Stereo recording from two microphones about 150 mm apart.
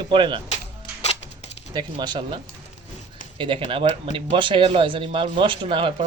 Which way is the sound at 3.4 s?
35° right (ahead or behind).